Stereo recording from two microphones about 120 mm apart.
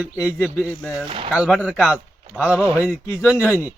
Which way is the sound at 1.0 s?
45° right (ahead or behind).